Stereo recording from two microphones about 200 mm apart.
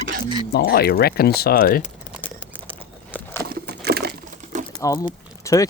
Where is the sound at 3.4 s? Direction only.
50° right (ahead or behind).